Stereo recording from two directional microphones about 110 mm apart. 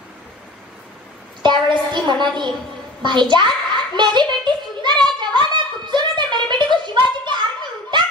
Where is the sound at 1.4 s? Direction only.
45° right (ahead or behind).